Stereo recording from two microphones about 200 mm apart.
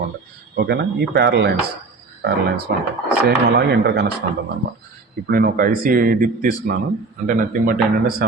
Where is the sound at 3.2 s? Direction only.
55° right (ahead or behind).